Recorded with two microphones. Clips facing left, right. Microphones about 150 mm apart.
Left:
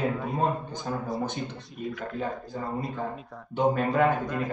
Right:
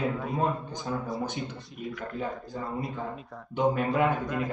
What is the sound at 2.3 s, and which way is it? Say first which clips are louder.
Speech: left 2 dB; centre (ahead or behind).